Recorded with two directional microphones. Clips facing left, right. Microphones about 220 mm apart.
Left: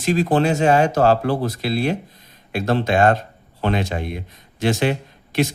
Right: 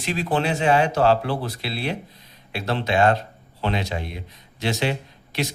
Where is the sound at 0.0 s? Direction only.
45° left (ahead or behind).